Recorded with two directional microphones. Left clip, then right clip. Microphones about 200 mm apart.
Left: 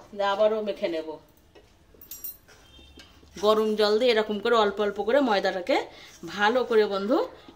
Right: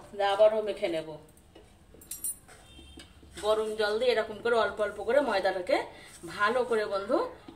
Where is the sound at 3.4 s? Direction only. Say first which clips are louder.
Left 6 dB; 55° left (ahead or behind).